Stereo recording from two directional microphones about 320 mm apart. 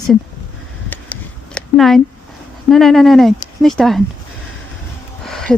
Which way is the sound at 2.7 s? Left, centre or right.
Centre.